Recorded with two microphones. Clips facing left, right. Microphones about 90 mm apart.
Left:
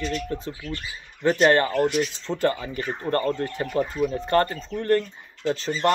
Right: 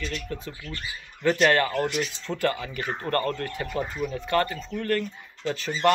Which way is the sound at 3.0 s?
20° left (ahead or behind).